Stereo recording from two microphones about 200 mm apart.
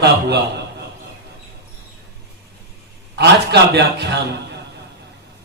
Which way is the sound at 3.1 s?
55° right (ahead or behind).